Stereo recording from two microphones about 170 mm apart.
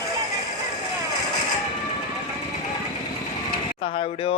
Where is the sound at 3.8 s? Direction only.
30° left (ahead or behind).